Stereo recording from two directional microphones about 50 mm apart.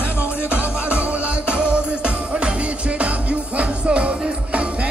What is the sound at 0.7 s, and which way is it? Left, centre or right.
Music, right.